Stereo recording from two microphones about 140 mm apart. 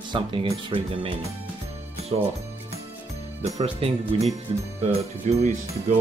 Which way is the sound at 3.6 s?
45° right (ahead or behind).